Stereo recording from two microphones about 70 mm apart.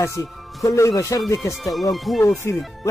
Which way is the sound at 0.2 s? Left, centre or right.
Left.